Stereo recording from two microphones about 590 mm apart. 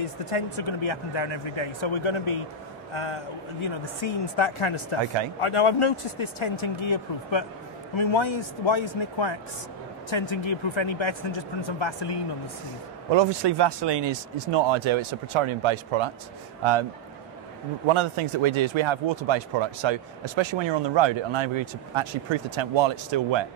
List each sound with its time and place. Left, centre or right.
0.0 s a man's voice: left
13.1 s speech: right
17.8 s speech: right